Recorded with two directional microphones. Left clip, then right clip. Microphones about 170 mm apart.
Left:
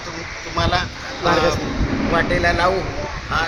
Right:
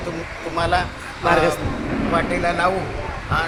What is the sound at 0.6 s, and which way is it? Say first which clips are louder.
Speech: even; 30° right (ahead or behind).